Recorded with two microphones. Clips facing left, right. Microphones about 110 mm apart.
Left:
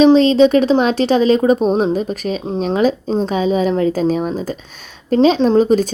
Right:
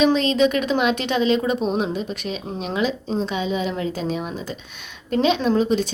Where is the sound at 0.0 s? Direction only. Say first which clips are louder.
Left 8 dB; 35° left (ahead or behind).